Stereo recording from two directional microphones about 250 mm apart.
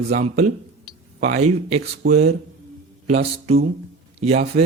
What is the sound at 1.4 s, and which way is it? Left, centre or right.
Speech, right.